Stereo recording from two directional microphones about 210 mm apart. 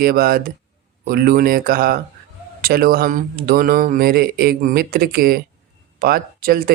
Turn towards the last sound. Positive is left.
turn(degrees=-45)  # may be behind; listen again after turning